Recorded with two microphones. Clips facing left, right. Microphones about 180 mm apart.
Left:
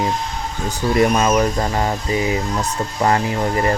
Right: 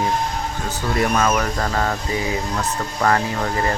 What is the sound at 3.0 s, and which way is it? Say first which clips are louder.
Speech: left 2 dB; 20° left (ahead or behind).